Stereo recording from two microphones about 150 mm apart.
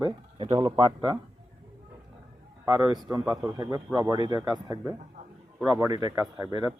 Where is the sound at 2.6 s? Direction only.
30° right (ahead or behind).